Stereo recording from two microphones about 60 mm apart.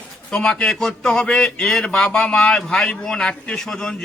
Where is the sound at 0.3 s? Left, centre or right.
Centre.